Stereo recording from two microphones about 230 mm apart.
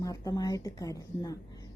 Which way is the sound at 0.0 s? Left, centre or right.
Centre.